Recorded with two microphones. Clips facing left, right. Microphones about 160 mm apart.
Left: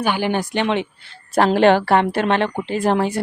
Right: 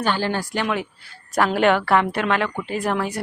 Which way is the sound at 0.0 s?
15° left (ahead or behind).